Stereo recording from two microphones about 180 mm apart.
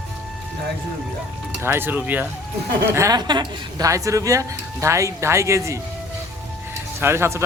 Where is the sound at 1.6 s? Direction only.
10° right (ahead or behind).